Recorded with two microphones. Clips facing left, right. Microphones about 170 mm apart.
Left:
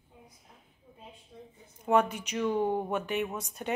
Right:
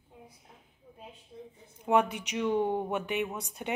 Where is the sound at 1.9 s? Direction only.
15° right (ahead or behind).